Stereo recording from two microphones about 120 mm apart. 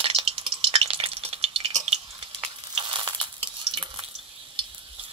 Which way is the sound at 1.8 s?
55° right (ahead or behind).